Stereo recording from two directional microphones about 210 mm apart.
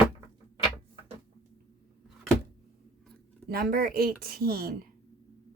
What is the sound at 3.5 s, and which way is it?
Speech, 45° right (ahead or behind).